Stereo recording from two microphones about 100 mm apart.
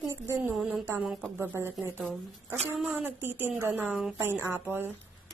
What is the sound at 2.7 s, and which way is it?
Speech, 20° right (ahead or behind).